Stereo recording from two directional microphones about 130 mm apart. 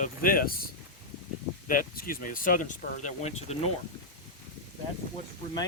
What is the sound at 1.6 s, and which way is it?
Speech, 90° left.